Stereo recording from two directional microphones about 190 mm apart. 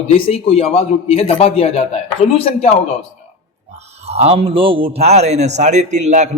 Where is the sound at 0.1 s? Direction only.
30° left (ahead or behind).